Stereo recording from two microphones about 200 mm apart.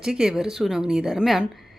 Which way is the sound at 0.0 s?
Centre (ahead or behind).